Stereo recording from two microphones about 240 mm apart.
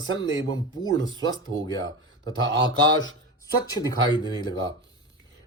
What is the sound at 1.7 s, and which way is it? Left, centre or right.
Speech, centre.